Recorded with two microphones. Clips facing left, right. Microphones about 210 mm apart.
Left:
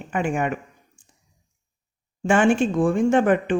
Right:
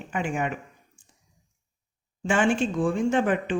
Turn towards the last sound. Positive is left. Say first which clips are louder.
# left 5 dB
turn(degrees=50)  # may be behind; listen again after turning